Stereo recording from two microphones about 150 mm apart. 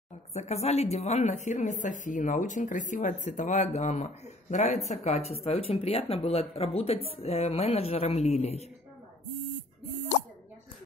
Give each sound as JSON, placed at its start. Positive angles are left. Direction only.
{"t": 0.3, "sound": "speech", "side_deg": 45}